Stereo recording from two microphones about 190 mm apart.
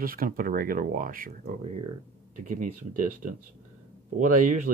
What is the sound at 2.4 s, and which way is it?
Speech, 45° right (ahead or behind).